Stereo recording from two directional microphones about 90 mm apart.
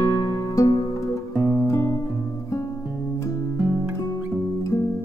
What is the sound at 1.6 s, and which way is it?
Guitar, 35° left (ahead or behind).